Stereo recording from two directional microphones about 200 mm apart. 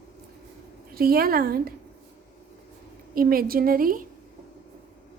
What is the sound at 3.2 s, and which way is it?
Speech, 45° right (ahead or behind).